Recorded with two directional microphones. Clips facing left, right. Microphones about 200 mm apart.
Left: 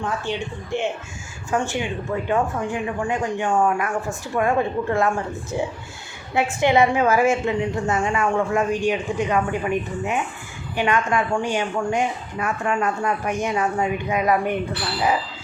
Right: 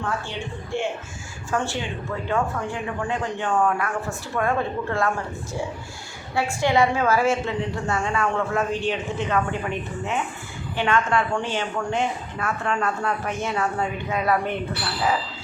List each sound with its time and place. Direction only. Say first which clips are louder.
0.0 s a woman's voice: left 3 dB; 15° left (ahead or behind)